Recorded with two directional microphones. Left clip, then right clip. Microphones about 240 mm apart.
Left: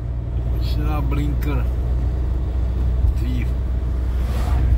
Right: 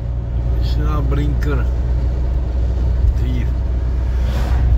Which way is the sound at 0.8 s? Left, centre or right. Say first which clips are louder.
Right 3 dB; right.